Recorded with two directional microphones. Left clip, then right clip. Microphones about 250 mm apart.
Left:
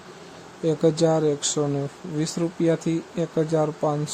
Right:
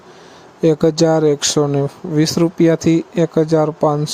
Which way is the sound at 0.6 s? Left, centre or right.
Right.